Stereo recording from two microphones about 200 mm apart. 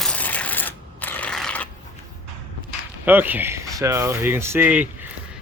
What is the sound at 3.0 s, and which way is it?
Speech, 10° right (ahead or behind).